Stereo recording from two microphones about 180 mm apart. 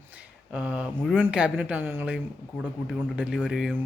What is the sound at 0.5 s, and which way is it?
A man's voice, 5° right (ahead or behind).